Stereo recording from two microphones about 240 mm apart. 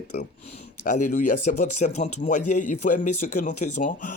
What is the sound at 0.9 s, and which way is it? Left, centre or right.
Speech, left.